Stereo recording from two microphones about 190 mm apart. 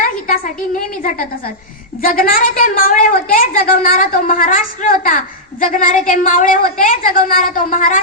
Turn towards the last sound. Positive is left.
turn(degrees=45)  # may be behind; listen again after turning